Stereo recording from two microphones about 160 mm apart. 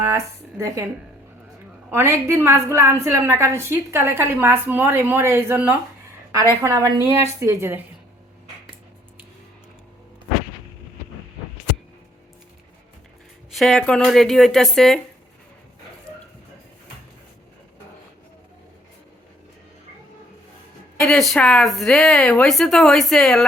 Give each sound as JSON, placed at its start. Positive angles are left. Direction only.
{"t": 1.9, "sound": "a woman's voice", "side_deg": -15}
{"t": 13.5, "sound": "speech", "side_deg": 0}
{"t": 21.1, "sound": "speech", "side_deg": 5}